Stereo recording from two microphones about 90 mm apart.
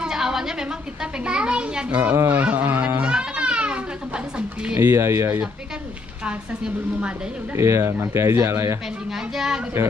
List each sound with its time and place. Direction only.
0.0 s a sound: 5° right (ahead or behind)
1.2 s a woman's voice: 10° right (ahead or behind)
3.0 s goat: 10° right (ahead or behind)
4.7 s speech: 25° right (ahead or behind)
6.2 s a woman's voice: 15° right (ahead or behind)
7.5 s speech: 30° right (ahead or behind)
9.1 s speech: 5° right (ahead or behind)